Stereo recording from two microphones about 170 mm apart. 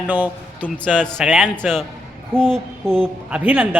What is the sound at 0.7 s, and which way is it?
A man's voice, 5° left (ahead or behind).